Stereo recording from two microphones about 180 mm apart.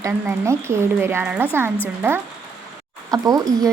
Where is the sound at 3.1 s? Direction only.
20° right (ahead or behind).